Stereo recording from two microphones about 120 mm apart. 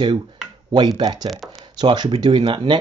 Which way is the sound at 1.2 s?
Centre (ahead or behind).